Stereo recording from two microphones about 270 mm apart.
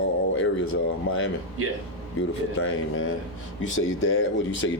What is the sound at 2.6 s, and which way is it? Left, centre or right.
Speech, left.